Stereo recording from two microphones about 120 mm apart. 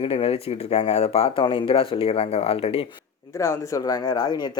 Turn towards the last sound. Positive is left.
turn(degrees=35)  # may be behind; listen again after turning